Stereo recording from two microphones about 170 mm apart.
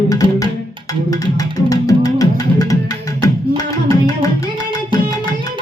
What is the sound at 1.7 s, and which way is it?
Music, 20° left (ahead or behind).